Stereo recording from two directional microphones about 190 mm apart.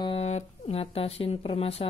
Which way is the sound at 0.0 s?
30° left (ahead or behind).